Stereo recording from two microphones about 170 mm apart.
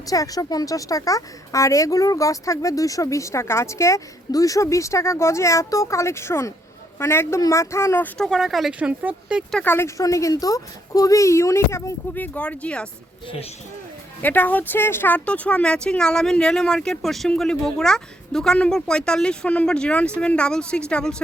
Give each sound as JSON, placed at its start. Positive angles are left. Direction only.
{"t": 0.1, "sound": "a woman's voice", "side_deg": 20}
{"t": 8.2, "sound": "speech", "side_deg": 0}
{"t": 9.6, "sound": "a child's voice", "side_deg": 10}
{"t": 13.2, "sound": "speech", "side_deg": 35}
{"t": 14.2, "sound": "speech", "side_deg": 10}